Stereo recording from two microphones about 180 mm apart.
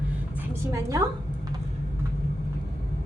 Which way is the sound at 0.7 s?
20° right (ahead or behind).